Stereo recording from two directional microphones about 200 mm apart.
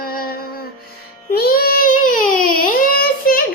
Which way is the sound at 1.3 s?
50° left (ahead or behind).